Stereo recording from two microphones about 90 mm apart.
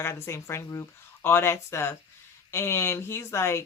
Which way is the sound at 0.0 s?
30° left (ahead or behind).